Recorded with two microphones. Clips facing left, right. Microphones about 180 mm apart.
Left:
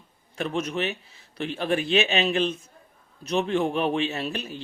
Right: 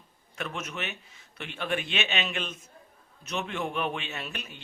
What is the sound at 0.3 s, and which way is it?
A man's voice, 30° left (ahead or behind).